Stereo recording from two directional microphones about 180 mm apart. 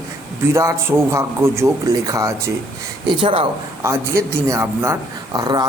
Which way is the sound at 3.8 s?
15° right (ahead or behind).